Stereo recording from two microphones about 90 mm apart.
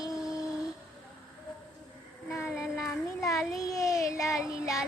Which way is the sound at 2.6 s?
Centre (ahead or behind).